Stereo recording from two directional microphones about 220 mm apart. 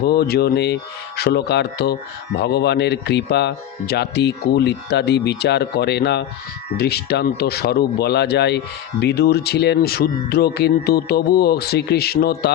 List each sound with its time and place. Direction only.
0.0 s speech: 45° left (ahead or behind)